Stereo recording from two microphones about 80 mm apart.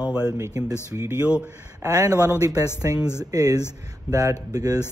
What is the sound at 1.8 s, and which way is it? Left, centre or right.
Speech, right.